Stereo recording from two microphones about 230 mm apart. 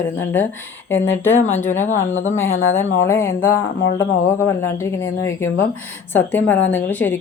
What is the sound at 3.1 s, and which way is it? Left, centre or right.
Speech, centre.